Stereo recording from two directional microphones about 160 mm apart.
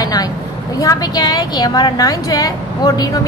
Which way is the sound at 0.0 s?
25° left (ahead or behind).